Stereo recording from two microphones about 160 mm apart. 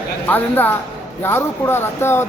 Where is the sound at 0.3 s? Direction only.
10° left (ahead or behind).